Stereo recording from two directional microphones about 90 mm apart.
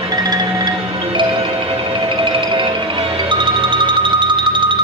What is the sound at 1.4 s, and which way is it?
Music, 80° right.